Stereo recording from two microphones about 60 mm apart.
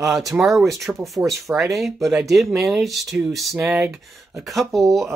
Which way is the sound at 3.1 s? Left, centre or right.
Right.